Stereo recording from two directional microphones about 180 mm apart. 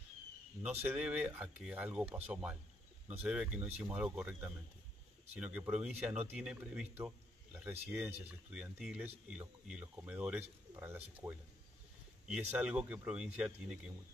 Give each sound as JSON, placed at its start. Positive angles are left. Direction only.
{"t": 0.8, "sound": "speech", "side_deg": -5}
{"t": 10.7, "sound": "bird", "side_deg": -15}
{"t": 11.2, "sound": "speech", "side_deg": -10}